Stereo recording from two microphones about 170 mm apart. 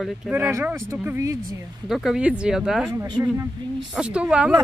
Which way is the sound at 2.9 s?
25° right (ahead or behind).